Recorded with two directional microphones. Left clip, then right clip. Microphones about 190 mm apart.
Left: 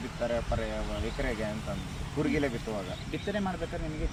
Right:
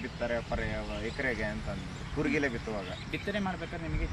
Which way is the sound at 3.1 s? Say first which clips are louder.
Left 1 dB; 10° right (ahead or behind).